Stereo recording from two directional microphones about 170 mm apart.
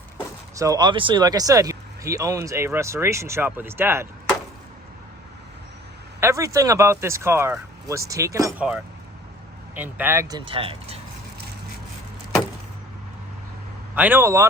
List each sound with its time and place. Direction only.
0.6 s speech: 25° right (ahead or behind)
6.1 s speech: 15° right (ahead or behind)
9.7 s speech: 10° right (ahead or behind); by 11.0 s 35° right (ahead or behind)
13.9 s speech: 10° right (ahead or behind)